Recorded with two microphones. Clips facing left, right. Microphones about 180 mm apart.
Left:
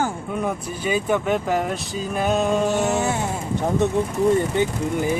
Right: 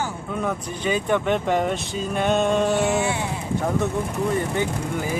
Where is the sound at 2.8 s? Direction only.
40° left (ahead or behind).